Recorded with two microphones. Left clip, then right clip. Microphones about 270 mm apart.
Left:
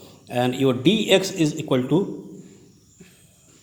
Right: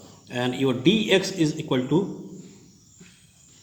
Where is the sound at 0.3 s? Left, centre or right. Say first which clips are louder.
Left 4 dB; left.